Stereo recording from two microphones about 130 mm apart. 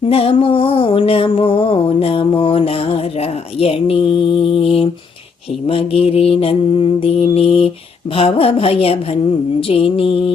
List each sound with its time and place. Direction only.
0.1 s music: 45° left (ahead or behind)